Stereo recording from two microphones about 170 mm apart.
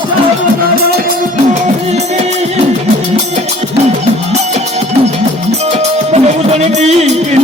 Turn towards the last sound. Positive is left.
turn(degrees=-40)  # may be behind; listen again after turning